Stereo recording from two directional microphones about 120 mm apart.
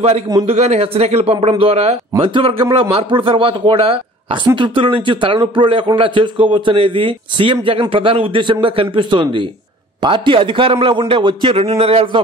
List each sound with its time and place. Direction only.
0.5 s a man's voice: 65° right (ahead or behind)